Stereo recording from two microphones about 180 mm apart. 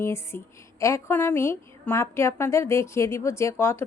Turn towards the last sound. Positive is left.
turn(degrees=15)  # may be behind; listen again after turning